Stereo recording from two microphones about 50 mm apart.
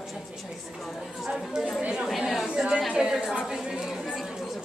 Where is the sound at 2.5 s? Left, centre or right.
Centre.